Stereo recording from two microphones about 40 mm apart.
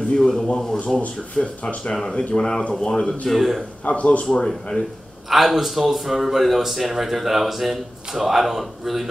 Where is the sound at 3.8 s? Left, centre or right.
Left.